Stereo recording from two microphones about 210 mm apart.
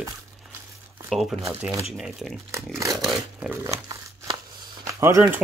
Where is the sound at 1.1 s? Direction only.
Centre (ahead or behind).